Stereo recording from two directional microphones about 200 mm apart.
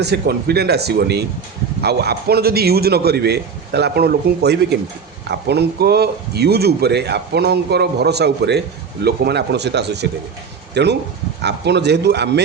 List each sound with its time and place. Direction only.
0.0 s a man's voice: 55° right (ahead or behind)